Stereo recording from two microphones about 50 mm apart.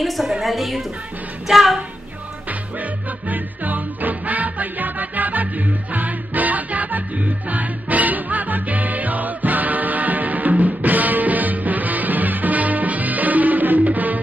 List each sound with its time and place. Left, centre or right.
0.0 s a sound: centre
1.5 s child singing: centre
2.8 s music: right